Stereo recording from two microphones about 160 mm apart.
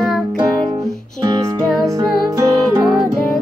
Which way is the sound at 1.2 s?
25° right (ahead or behind).